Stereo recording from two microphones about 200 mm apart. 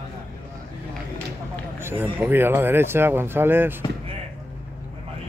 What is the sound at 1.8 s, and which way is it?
Run, 10° right (ahead or behind).